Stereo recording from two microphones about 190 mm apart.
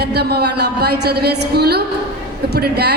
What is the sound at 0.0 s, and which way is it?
A woman's voice, 60° right (ahead or behind).